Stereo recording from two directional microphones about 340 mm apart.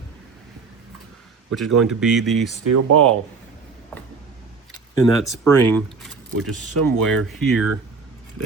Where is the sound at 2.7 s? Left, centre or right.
Right.